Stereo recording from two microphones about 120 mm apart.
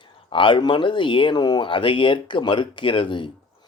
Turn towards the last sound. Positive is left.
turn(degrees=45)  # may be behind; listen again after turning